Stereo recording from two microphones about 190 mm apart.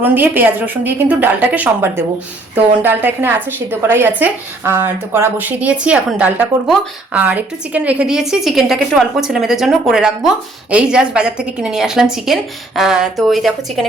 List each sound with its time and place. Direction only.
0.0 s a woman's voice: 10° right (ahead or behind)